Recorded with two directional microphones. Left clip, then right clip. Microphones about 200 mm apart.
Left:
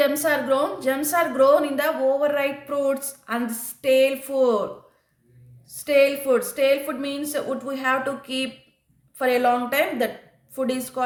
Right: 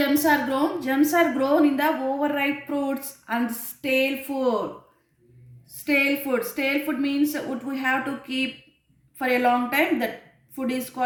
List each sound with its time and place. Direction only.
0.0 s a woman's voice: 45° left (ahead or behind)
5.8 s a woman's voice: 45° left (ahead or behind)